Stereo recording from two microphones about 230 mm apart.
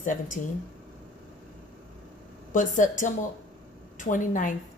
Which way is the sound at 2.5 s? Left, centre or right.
Left.